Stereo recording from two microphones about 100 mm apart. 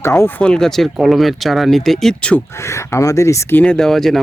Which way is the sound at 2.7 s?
30° left (ahead or behind).